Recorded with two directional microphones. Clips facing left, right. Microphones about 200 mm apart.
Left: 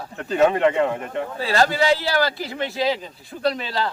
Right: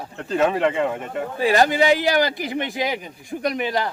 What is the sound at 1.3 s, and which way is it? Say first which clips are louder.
Speech: right 3 dB; 15° right (ahead or behind).